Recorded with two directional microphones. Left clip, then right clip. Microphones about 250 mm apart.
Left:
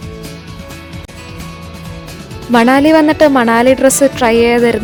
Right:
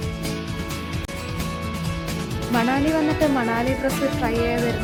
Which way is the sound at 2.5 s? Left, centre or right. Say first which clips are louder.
Left 13 dB; left.